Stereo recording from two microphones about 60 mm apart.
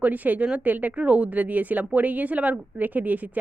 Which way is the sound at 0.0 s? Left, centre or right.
Right.